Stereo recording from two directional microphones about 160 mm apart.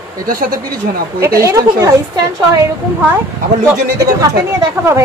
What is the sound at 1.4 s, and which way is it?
Speech, 20° right (ahead or behind).